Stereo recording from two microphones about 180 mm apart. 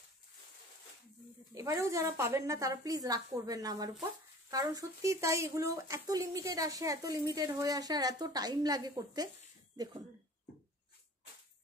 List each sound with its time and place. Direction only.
1.5 s a woman's voice: 15° right (ahead or behind)